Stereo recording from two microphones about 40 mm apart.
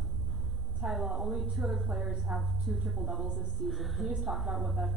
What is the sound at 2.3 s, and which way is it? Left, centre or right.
A woman's voice, centre.